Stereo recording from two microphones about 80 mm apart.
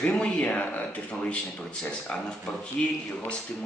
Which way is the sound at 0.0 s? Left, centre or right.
Centre.